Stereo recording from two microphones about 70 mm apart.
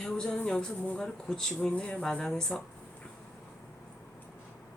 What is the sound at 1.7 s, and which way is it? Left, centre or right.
Speech, centre.